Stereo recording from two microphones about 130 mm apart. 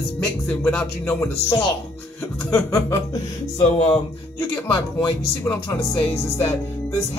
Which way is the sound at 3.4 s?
50° left (ahead or behind).